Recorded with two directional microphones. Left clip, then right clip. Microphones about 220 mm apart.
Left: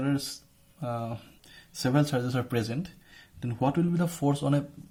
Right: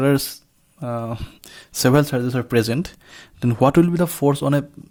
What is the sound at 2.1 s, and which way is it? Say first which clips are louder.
Speech: right 7 dB; 35° right (ahead or behind).